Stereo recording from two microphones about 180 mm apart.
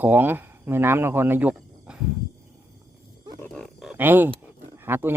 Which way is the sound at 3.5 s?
5° right (ahead or behind).